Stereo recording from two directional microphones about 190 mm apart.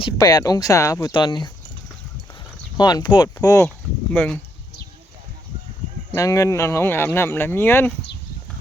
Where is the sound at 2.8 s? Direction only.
20° left (ahead or behind).